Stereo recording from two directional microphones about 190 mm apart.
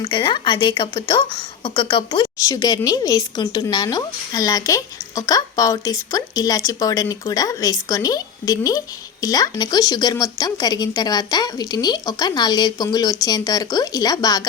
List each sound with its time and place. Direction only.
0.0 s a woman's voice: 25° left (ahead or behind)